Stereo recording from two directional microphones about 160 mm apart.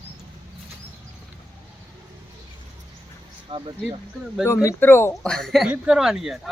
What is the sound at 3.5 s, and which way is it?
Speech, 30° right (ahead or behind).